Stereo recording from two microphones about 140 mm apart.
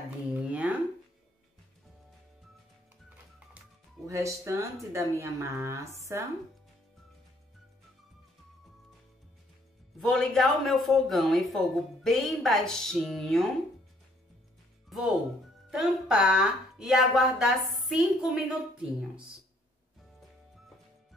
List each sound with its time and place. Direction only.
0.3 s a sound: 10° right (ahead or behind)
4.0 s speech: 20° right (ahead or behind)
9.9 s speech: centre (ahead or behind)
14.9 s speech: centre (ahead or behind)